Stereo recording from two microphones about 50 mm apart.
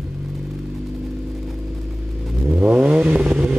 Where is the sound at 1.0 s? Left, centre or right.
Centre.